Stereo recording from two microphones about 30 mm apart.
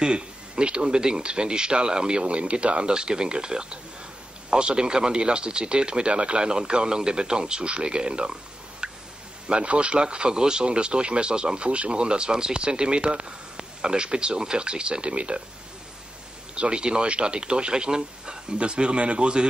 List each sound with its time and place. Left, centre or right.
0.0 s speech: right
2.2 s speech: right
8.8 s a sound: right
9.5 s speech: right
10.0 s speech: right
16.5 s speech: right